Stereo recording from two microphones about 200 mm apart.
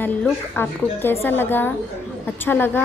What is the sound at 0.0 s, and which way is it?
A woman's voice, 10° left (ahead or behind).